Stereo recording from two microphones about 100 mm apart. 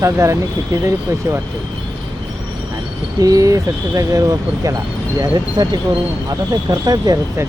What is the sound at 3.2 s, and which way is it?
Speech, 35° right (ahead or behind).